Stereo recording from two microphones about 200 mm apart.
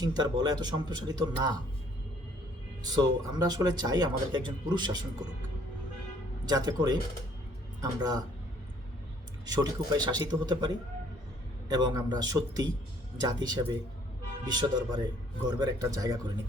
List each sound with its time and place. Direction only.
0.0 s speech: 20° right (ahead or behind)
2.8 s speech: 20° right (ahead or behind)
6.4 s speech: 20° right (ahead or behind)
9.5 s speech: 20° right (ahead or behind)
11.7 s speech: 20° right (ahead or behind)